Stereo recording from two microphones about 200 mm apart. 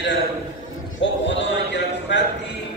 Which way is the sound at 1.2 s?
60° left (ahead or behind).